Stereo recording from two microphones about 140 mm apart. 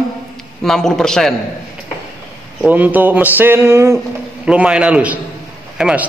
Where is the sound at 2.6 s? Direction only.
10° right (ahead or behind).